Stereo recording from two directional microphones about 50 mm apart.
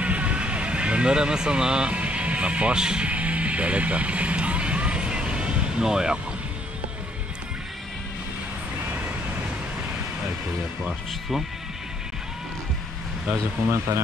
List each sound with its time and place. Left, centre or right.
0.0 s a sound: right
11.1 s speech: centre
13.7 s speech: right